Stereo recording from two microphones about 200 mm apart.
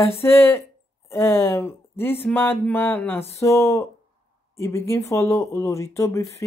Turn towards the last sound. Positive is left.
turn(degrees=15)  # may be behind; listen again after turning